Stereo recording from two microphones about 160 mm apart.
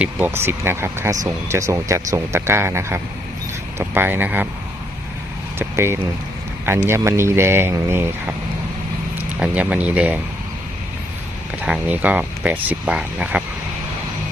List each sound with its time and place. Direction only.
0.0 s speech: 15° right (ahead or behind)
5.5 s speech: 15° right (ahead or behind)
9.4 s speech: 10° right (ahead or behind)
11.6 s speech: 10° right (ahead or behind)